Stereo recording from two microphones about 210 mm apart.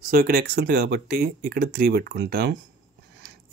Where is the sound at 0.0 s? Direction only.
45° right (ahead or behind).